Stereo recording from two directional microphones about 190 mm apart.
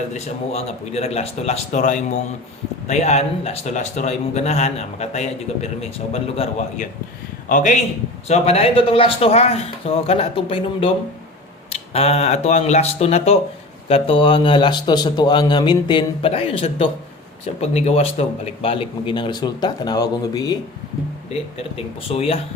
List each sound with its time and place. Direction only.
0.1 s a man's voice: 35° left (ahead or behind)
11.9 s a man's voice: 35° left (ahead or behind)
22.1 s speech: 30° left (ahead or behind)